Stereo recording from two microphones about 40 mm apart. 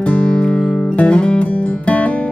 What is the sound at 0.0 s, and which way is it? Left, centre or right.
Music, left.